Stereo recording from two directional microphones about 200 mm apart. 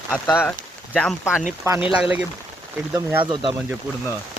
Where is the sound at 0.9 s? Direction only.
5° left (ahead or behind).